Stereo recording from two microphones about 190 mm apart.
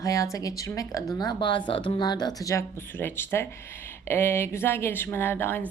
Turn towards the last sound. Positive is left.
turn(degrees=10)  # may be behind; listen again after turning